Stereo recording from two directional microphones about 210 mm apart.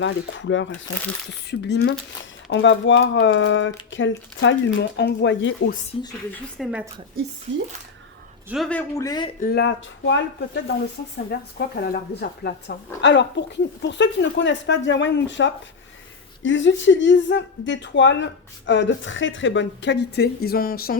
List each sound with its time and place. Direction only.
0.0 s speech: 60° left (ahead or behind)
5.9 s speech: 25° left (ahead or behind)
6.6 s speech: 5° right (ahead or behind)
8.4 s speech: centre (ahead or behind)
9.0 s speech: 20° left (ahead or behind)
9.4 s speech: 50° left (ahead or behind)